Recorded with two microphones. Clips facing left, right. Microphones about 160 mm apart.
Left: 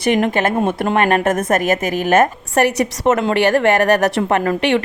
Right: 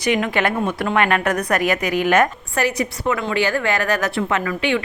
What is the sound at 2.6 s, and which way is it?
A woman's voice, 70° left (ahead or behind).